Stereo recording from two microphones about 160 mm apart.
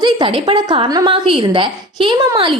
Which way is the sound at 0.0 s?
30° right (ahead or behind).